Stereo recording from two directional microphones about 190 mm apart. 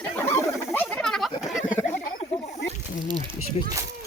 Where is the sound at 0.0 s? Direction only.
10° left (ahead or behind).